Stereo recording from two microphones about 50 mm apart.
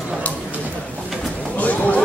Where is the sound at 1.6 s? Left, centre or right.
Left.